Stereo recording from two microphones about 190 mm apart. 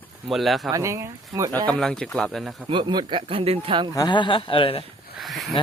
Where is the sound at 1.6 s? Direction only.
5° left (ahead or behind).